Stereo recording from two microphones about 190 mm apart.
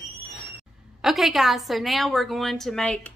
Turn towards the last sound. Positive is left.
turn(degrees=5)  # may be behind; listen again after turning